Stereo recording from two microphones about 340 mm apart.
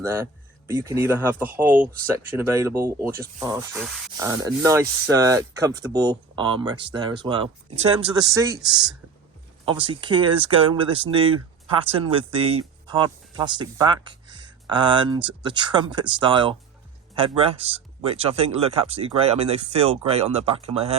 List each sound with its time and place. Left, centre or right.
0.0 s speech: centre